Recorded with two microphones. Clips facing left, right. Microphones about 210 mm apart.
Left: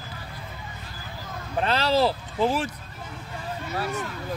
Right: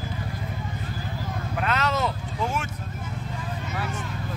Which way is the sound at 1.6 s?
30° left (ahead or behind).